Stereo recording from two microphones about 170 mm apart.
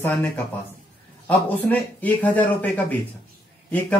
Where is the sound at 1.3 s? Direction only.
10° left (ahead or behind).